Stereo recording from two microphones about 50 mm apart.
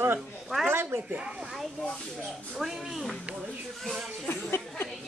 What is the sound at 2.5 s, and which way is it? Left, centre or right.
Speech, centre.